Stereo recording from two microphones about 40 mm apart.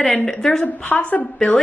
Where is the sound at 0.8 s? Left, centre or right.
Left.